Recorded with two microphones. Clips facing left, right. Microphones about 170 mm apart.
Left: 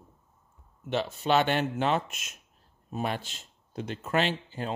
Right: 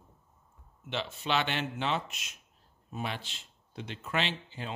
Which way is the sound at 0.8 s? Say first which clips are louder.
Left 6 dB; 45° left (ahead or behind).